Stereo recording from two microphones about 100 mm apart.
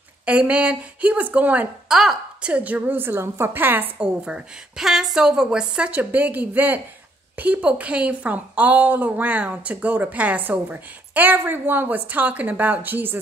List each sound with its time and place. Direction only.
0.2 s a woman's voice: 15° right (ahead or behind)
1.9 s a woman's voice: 5° right (ahead or behind)